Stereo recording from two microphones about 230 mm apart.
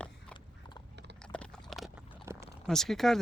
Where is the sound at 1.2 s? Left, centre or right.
Centre.